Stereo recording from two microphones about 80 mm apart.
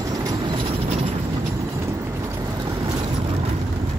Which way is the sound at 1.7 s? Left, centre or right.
Right.